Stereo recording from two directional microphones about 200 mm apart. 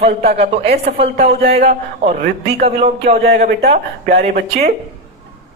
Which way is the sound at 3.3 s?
50° right (ahead or behind).